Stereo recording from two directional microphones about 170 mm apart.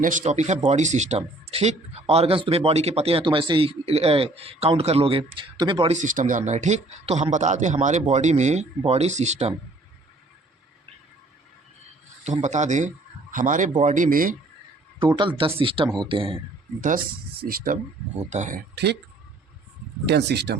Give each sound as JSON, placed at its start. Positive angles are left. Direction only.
{"t": 0.0, "sound": "speech", "side_deg": -50}
{"t": 5.9, "sound": "a man's voice", "side_deg": -50}
{"t": 12.2, "sound": "a man's voice", "side_deg": -45}
{"t": 14.9, "sound": "speech", "side_deg": -25}
{"t": 16.8, "sound": "speech", "side_deg": -55}
{"t": 18.2, "sound": "a man's voice", "side_deg": -45}
{"t": 20.1, "sound": "speech", "side_deg": -80}